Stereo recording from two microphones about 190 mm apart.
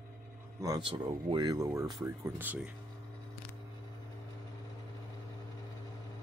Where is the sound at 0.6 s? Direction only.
25° right (ahead or behind).